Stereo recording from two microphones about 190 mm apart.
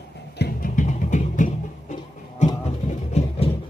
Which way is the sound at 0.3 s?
50° left (ahead or behind).